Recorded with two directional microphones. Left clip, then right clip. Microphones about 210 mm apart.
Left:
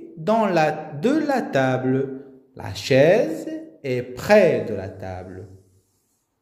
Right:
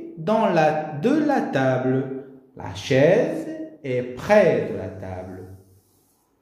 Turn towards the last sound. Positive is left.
turn(degrees=50)  # may be behind; listen again after turning